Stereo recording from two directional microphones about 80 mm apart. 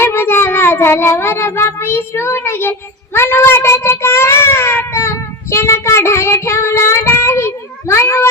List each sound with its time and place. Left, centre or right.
0.0 s child singing: left